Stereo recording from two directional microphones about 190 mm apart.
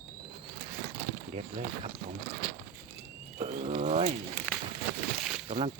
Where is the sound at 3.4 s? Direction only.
35° right (ahead or behind).